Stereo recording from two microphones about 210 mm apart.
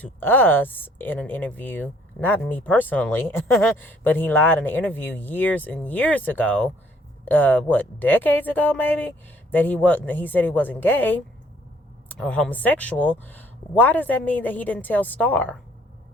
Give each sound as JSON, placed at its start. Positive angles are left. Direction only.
{"t": 0.0, "sound": "speech", "side_deg": 10}